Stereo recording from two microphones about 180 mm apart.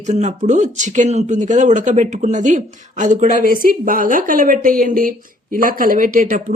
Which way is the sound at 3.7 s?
50° right (ahead or behind).